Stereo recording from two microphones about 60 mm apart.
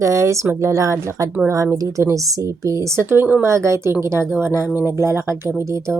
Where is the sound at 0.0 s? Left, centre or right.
Right.